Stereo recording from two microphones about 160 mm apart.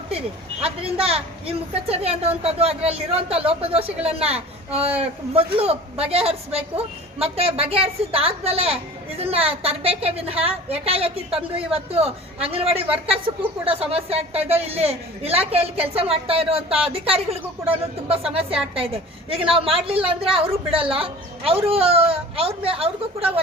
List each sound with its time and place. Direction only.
0.6 s a woman's voice: 35° right (ahead or behind)